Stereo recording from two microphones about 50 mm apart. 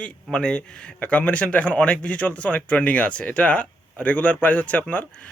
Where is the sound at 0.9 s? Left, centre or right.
Left.